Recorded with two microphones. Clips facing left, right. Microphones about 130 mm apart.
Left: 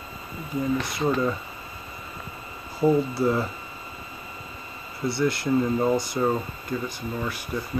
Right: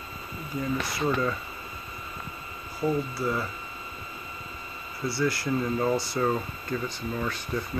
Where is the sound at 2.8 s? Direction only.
25° left (ahead or behind).